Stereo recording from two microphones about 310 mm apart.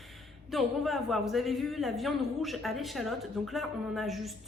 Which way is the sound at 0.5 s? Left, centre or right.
Centre.